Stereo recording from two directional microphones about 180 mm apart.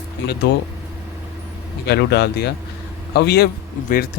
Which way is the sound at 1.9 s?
65° left (ahead or behind).